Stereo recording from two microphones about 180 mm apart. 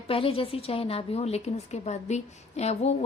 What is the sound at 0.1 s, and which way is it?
A woman's voice, 30° left (ahead or behind).